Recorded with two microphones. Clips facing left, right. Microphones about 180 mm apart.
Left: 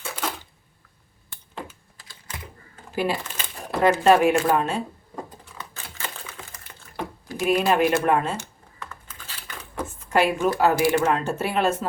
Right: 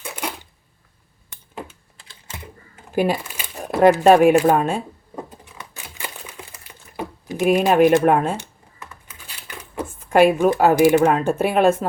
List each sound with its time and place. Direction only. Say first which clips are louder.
2.9 s speech: right 5 dB; 50° right (ahead or behind)
3.2 s crumpling: right 5 dB; 10° right (ahead or behind)
3.8 s speech: right 5 dB; 55° right (ahead or behind)
5.5 s a sound: even; 15° right (ahead or behind)
7.3 s speech: right 5 dB; 45° right (ahead or behind)
8.8 s computer keyboard: left 1 dB; 15° right (ahead or behind)
10.1 s speech: right 7 dB; 55° right (ahead or behind)